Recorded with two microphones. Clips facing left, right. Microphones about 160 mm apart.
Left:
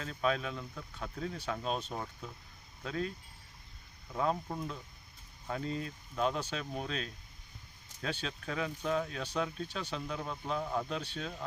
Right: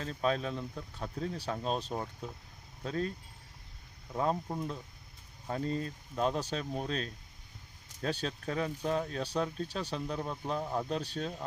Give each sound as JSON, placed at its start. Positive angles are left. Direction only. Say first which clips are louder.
{"t": 0.0, "sound": "speech", "louder": "right 1 dB", "side_deg": -35}
{"t": 4.5, "sound": "speech", "louder": "right 2 dB", "side_deg": -25}
{"t": 5.5, "sound": "speech", "louder": "right 3 dB", "side_deg": -35}